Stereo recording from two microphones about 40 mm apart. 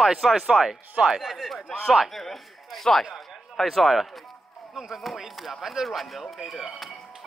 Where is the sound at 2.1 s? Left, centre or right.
Centre.